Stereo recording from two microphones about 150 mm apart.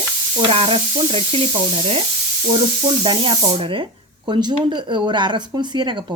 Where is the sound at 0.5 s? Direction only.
40° right (ahead or behind).